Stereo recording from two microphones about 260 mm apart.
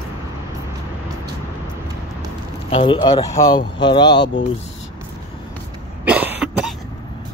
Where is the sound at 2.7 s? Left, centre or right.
Centre.